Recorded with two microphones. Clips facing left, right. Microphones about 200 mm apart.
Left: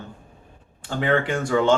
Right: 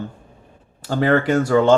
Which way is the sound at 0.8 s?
40° right (ahead or behind).